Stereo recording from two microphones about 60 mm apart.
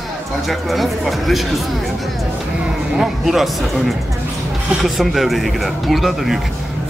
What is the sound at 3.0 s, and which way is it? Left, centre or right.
Speech, centre.